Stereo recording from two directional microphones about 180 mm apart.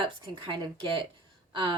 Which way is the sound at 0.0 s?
25° right (ahead or behind).